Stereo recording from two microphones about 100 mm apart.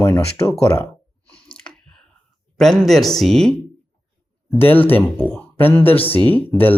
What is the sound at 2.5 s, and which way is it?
Speech, 5° left (ahead or behind).